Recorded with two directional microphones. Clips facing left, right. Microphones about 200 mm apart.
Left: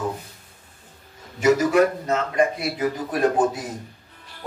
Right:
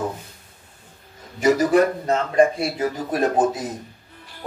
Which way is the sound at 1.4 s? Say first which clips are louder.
Right 1 dB; 35° right (ahead or behind).